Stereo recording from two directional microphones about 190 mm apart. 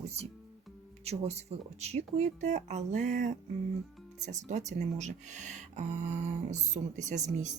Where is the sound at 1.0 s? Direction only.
35° right (ahead or behind).